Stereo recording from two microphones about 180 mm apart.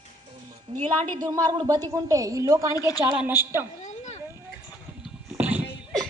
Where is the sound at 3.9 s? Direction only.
40° left (ahead or behind).